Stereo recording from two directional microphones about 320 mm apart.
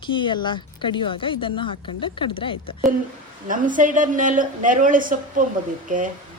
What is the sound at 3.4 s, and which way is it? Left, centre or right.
A woman's voice, right.